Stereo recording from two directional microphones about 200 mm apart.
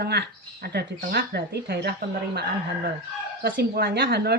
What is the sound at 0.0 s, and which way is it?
Speech, 55° right (ahead or behind).